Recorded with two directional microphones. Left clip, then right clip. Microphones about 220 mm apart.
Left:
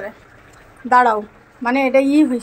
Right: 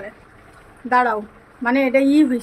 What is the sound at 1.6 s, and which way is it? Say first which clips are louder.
Speech: left 2 dB; 5° right (ahead or behind).